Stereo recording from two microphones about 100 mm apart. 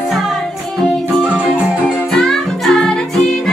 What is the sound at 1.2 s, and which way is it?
Music, 10° right (ahead or behind).